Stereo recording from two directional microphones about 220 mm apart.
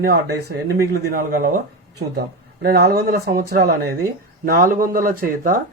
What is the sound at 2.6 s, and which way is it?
Speech, 45° right (ahead or behind).